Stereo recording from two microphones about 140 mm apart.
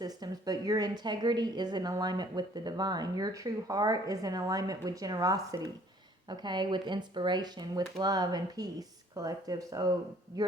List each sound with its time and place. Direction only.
0.0 s speech: 30° right (ahead or behind)